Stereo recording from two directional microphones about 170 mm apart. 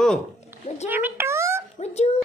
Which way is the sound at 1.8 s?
40° left (ahead or behind).